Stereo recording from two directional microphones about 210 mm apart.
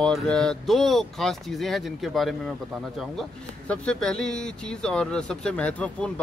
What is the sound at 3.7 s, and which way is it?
Speech, 5° left (ahead or behind).